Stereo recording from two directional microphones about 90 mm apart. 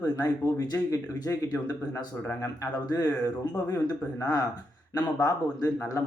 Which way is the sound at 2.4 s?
40° left (ahead or behind).